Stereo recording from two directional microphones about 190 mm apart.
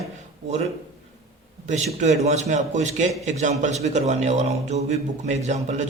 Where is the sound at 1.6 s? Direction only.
40° right (ahead or behind).